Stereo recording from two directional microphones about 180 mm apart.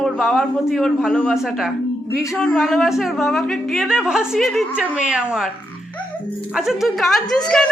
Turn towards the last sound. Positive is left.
turn(degrees=5)  # may be behind; listen again after turning